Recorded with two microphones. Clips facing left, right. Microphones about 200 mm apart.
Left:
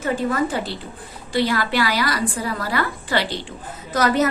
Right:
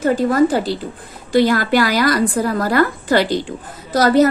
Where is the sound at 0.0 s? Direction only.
40° right (ahead or behind).